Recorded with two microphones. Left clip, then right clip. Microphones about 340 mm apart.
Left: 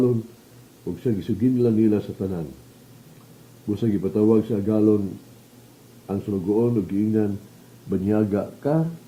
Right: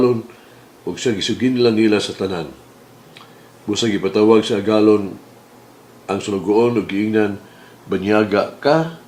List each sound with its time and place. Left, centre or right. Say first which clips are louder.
0.9 s speech: right 7 dB; centre
2.0 s speech: right 7 dB; centre
3.7 s speech: right 6 dB; centre
6.2 s speech: right 7 dB; centre